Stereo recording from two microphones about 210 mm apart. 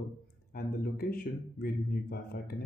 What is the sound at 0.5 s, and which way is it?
A man's voice, 45° left (ahead or behind).